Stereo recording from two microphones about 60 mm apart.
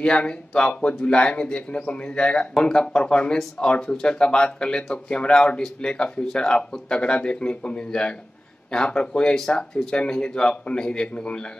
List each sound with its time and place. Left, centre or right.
0.0 s speech: centre